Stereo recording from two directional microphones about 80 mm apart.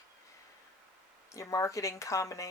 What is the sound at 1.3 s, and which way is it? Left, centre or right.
Speech, left.